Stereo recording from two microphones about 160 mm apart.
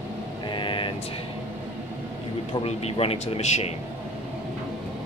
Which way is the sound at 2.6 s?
40° left (ahead or behind).